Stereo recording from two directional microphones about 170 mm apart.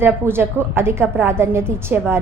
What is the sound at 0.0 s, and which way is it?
A woman's voice, 15° right (ahead or behind).